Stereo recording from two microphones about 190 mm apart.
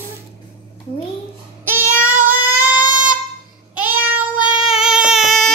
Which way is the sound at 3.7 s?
10° right (ahead or behind).